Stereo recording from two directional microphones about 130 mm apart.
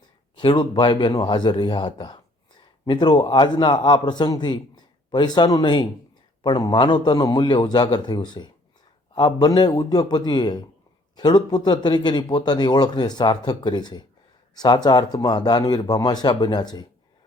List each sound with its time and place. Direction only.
0.3 s a man's voice: 35° left (ahead or behind)